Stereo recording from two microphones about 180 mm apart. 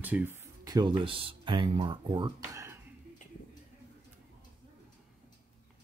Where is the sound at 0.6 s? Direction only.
20° right (ahead or behind).